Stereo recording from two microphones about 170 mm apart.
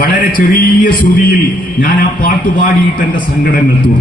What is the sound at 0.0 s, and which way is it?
A man's voice, 55° left (ahead or behind).